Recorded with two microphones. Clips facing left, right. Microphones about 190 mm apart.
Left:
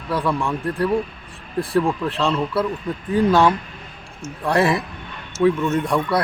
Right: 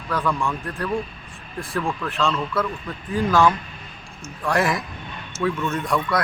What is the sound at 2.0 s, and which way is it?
Speech, 30° left (ahead or behind).